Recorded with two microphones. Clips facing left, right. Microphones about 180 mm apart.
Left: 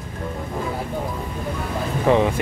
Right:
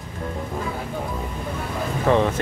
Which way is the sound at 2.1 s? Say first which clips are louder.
Left 2 dB; 15° left (ahead or behind).